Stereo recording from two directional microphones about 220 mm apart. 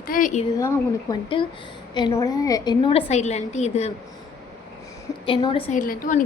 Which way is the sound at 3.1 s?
30° left (ahead or behind).